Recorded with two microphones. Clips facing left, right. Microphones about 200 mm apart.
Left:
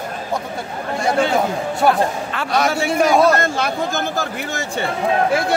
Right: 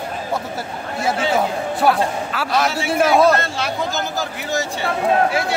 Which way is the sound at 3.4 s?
50° left (ahead or behind).